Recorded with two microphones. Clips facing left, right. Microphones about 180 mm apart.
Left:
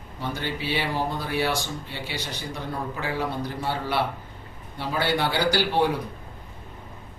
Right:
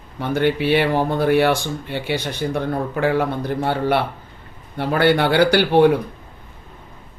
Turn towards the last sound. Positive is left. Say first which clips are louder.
# right 9 dB
turn(degrees=-60)  # may be behind; listen again after turning